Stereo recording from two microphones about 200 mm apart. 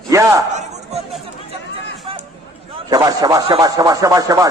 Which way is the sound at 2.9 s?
20° right (ahead or behind).